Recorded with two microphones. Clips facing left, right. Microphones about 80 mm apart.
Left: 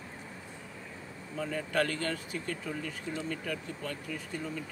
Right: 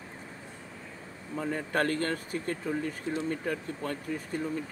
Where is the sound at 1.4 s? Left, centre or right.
Right.